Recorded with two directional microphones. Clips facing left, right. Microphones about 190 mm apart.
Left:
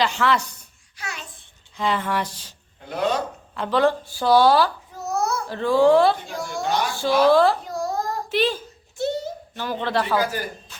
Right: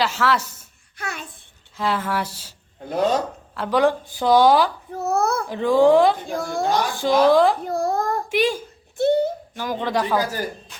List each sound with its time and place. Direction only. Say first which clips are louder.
0.0 s speech: even; 5° right (ahead or behind)
0.9 s babbling: right 4 dB; 55° right (ahead or behind)
1.7 s speech: even; 5° right (ahead or behind)
2.9 s speech: right 3 dB; 40° right (ahead or behind)
3.5 s speech: right 1 dB; 10° right (ahead or behind)
4.9 s a sound: right 4 dB; 60° right (ahead or behind)
5.5 s speech: right 1 dB; 15° right (ahead or behind)
6.2 s a woman's voice: right 4 dB; 55° right (ahead or behind)
6.9 s speech: even; 15° right (ahead or behind)
7.6 s a sound: right 4 dB; 55° right (ahead or behind)
8.3 s speech: even; 10° right (ahead or behind)
9.0 s a sound: right 7 dB; 60° right (ahead or behind)
9.6 s speech: right 1 dB; 10° right (ahead or behind)